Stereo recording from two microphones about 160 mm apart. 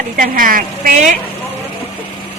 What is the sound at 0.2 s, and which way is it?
Speech, 60° right (ahead or behind).